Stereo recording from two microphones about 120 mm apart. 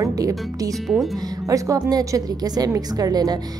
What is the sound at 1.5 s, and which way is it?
A woman's voice, 30° right (ahead or behind).